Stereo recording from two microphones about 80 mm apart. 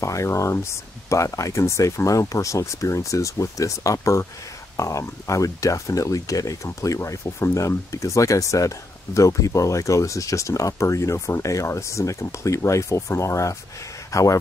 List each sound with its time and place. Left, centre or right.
0.0 s speech: left